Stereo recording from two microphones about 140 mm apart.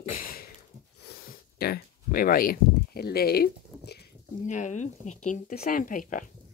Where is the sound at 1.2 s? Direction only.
90° left.